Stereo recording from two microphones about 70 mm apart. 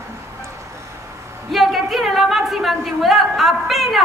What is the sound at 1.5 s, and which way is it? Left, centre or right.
A woman's voice, centre.